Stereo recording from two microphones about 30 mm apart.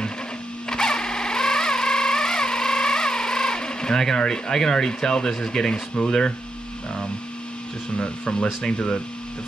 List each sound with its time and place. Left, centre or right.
0.7 s a sound: left
4.2 s speech: left
8.0 s speech: left